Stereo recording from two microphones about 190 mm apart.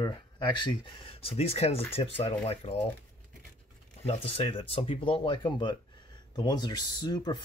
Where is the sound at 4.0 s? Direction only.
30° left (ahead or behind).